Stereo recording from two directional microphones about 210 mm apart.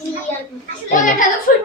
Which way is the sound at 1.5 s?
40° left (ahead or behind).